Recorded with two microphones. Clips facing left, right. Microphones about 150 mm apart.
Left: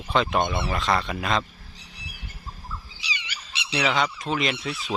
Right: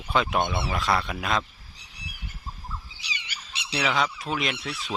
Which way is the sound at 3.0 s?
50° right (ahead or behind).